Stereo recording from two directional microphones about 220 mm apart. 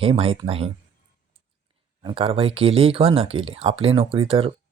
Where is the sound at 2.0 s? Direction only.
25° right (ahead or behind).